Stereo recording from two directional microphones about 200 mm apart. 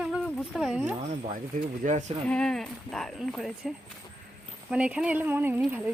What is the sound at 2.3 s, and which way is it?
Speech, 5° left (ahead or behind).